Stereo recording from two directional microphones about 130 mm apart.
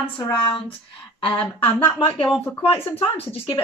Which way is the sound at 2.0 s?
40° left (ahead or behind).